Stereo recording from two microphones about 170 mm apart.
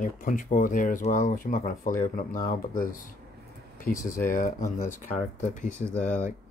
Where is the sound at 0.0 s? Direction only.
55° left (ahead or behind).